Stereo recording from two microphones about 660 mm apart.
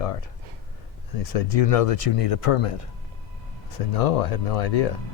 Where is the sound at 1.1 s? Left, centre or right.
Left.